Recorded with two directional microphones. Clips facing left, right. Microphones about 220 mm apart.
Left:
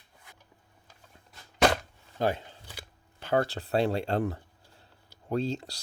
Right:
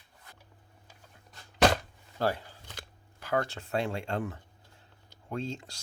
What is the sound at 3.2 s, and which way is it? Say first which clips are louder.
Speech: left 4 dB; 30° left (ahead or behind).